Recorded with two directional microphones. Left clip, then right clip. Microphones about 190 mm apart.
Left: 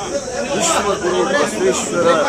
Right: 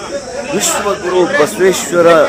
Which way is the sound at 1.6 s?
30° right (ahead or behind).